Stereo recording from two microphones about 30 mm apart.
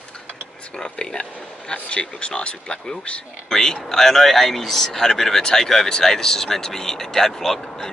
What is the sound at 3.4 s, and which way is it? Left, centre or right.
Speech, centre.